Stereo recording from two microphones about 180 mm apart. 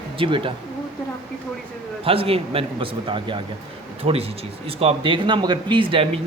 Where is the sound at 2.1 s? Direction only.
30° right (ahead or behind).